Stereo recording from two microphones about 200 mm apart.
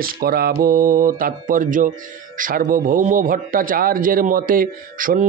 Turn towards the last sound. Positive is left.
turn(degrees=-45)  # may be behind; listen again after turning